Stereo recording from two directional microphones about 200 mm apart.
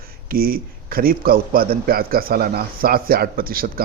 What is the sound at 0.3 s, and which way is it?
A man's voice, 50° right (ahead or behind).